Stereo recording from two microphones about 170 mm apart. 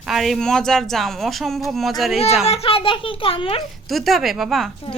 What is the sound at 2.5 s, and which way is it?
A child's voice, 35° left (ahead or behind).